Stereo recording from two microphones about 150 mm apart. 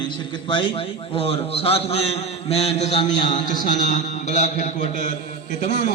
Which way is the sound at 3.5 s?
55° left (ahead or behind).